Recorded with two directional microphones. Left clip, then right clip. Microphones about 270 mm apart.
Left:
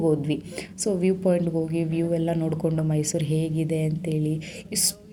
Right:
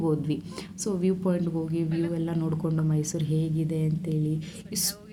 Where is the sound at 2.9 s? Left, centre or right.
Right.